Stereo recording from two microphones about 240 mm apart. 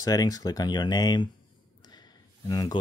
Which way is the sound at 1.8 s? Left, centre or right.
Centre.